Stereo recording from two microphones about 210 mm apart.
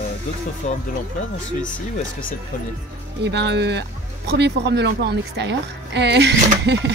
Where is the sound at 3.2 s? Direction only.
55° right (ahead or behind).